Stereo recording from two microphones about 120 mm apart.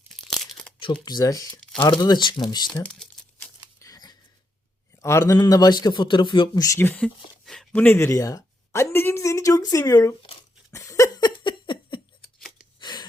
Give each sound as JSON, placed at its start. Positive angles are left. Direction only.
{"t": 0.3, "sound": "tearing", "side_deg": 0}
{"t": 1.0, "sound": "a man's voice", "side_deg": 30}
{"t": 2.8, "sound": "crumpling", "side_deg": 10}
{"t": 3.8, "sound": "wheeze", "side_deg": 30}
{"t": 5.0, "sound": "a man's voice", "side_deg": 25}
{"t": 6.7, "sound": "speech", "side_deg": 15}
{"t": 7.7, "sound": "speech", "side_deg": 15}
{"t": 10.7, "sound": "laughter", "side_deg": 25}
{"t": 12.8, "sound": "gasp", "side_deg": 35}